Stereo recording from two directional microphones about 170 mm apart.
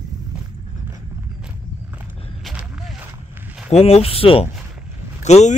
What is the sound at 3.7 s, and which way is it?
Speech, 35° left (ahead or behind).